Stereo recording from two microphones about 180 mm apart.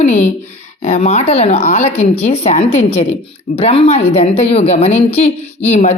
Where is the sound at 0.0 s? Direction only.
40° left (ahead or behind).